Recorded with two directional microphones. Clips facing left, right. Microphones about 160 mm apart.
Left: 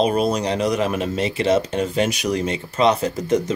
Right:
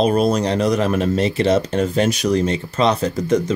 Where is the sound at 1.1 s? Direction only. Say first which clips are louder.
Right 1 dB; 35° right (ahead or behind).